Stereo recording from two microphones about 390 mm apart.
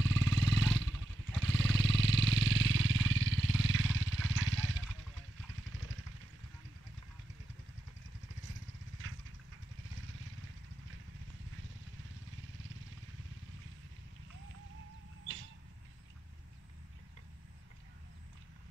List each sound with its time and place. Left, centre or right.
0.0 s wild animals: right
9.0 s vehicle: right